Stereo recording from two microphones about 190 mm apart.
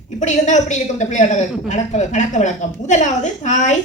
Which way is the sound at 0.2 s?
40° left (ahead or behind).